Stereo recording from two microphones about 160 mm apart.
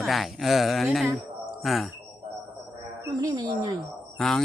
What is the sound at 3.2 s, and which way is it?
Speech, 25° right (ahead or behind).